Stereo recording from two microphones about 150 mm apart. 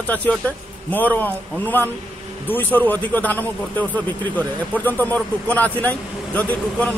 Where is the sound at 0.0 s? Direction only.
10° left (ahead or behind).